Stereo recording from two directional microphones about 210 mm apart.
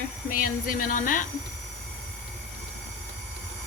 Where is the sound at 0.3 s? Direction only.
40° left (ahead or behind).